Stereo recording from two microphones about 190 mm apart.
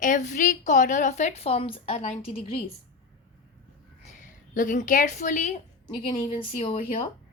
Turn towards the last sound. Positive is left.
turn(degrees=35)  # may be behind; listen again after turning